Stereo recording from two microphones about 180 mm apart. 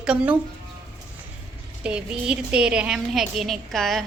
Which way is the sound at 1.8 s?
5° right (ahead or behind).